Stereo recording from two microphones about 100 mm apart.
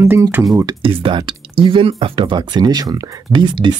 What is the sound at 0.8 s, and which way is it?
Speech, 55° right (ahead or behind).